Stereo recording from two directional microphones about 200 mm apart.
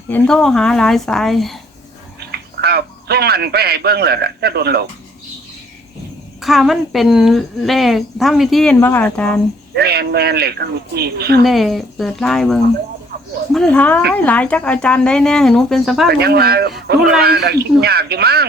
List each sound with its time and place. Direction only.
0.1 s a woman's voice: 5° left (ahead or behind)
2.3 s speech: 55° right (ahead or behind)
6.4 s a woman's voice: centre (ahead or behind)
9.7 s speech: 55° right (ahead or behind)
11.4 s a woman's voice: centre (ahead or behind)
16.0 s speech: 55° right (ahead or behind)